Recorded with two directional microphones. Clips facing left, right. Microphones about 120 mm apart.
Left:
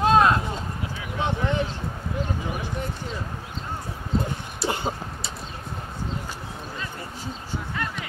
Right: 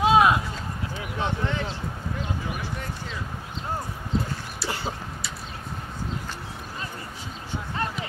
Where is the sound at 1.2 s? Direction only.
15° left (ahead or behind).